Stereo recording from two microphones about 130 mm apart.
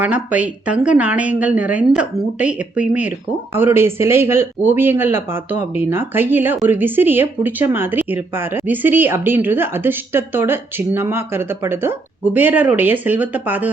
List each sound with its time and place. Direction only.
0.0 s speech: 10° right (ahead or behind)